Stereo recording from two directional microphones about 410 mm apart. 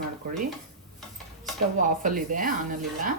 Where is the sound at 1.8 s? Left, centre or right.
Centre.